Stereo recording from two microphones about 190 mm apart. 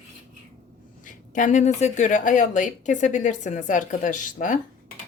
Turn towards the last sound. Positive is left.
turn(degrees=45)  # may be behind; listen again after turning